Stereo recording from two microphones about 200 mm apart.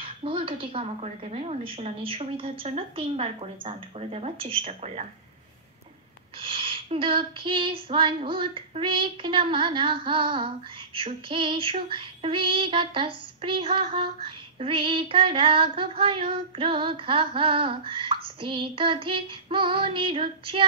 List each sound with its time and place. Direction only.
0.0 s female singing: 25° right (ahead or behind)
6.4 s female singing: 25° right (ahead or behind)